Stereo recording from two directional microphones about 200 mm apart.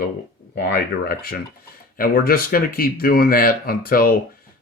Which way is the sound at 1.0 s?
50° left (ahead or behind).